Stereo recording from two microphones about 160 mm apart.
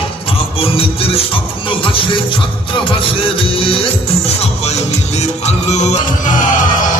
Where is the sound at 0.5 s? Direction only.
35° left (ahead or behind).